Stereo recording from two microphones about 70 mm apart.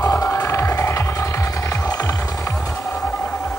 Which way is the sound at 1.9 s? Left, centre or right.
Left.